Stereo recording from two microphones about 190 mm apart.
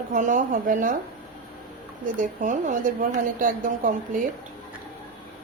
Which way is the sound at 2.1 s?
40° right (ahead or behind).